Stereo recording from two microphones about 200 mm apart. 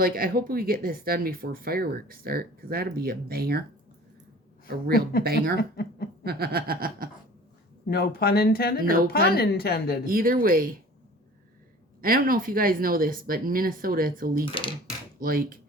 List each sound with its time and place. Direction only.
0.0 s speech: 45° right (ahead or behind)
5.2 s speech: 50° right (ahead or behind)
5.5 s a woman's voice: 55° left (ahead or behind)
6.2 s speech: 50° right (ahead or behind)
7.9 s a woman's voice: 50° left (ahead or behind)
10.1 s speech: 45° right (ahead or behind)
11.9 s speech: 45° right (ahead or behind)
14.5 s speech: 25° left (ahead or behind)
15.2 s speech: 45° right (ahead or behind)